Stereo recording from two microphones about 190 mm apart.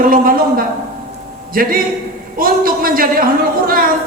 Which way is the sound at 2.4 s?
50° right (ahead or behind).